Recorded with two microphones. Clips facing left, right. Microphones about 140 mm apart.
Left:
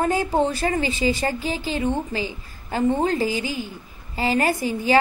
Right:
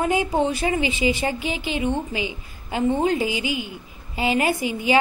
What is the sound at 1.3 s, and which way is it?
Speech, 35° left (ahead or behind).